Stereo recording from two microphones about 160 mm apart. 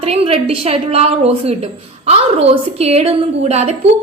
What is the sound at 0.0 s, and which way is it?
A woman's voice, 40° right (ahead or behind).